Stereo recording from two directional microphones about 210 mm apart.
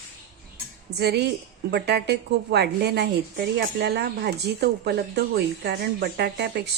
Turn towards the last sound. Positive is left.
turn(degrees=-55)  # may be behind; listen again after turning